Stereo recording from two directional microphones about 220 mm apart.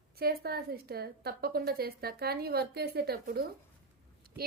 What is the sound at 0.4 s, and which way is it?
A woman's voice, 45° right (ahead or behind).